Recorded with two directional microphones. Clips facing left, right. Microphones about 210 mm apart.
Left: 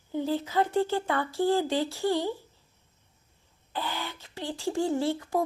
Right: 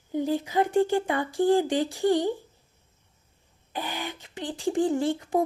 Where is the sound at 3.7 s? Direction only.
15° right (ahead or behind).